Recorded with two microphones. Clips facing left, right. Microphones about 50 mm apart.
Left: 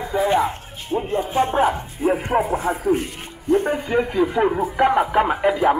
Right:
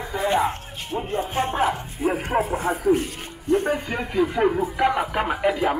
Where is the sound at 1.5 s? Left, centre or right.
Centre.